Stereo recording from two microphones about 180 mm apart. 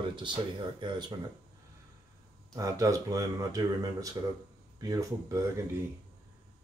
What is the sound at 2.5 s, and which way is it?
Speech, 20° right (ahead or behind).